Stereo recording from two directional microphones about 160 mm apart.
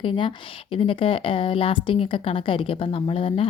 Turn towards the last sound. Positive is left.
turn(degrees=35)  # may be behind; listen again after turning